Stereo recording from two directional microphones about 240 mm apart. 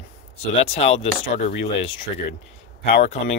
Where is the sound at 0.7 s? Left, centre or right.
Left.